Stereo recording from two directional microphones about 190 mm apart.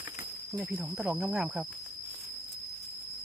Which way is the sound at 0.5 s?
Centre (ahead or behind).